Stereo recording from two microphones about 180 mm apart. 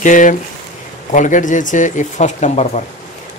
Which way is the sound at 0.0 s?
45° left (ahead or behind).